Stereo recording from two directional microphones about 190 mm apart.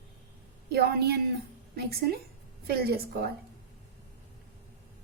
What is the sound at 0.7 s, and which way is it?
Speech, 55° right (ahead or behind).